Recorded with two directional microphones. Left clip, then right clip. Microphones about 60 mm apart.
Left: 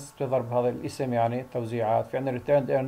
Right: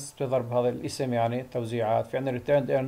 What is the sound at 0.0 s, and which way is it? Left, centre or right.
Speech, centre.